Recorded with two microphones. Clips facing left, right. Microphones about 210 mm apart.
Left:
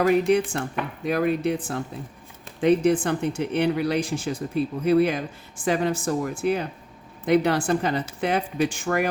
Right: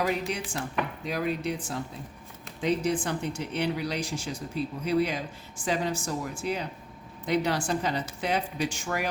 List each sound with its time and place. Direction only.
0.0 s speech: 60° left (ahead or behind)